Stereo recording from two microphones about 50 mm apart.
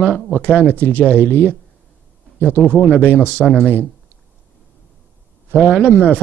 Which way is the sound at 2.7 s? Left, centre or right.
Right.